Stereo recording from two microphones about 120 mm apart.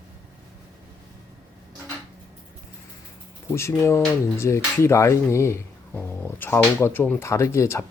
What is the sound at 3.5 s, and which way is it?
Speech, 20° left (ahead or behind).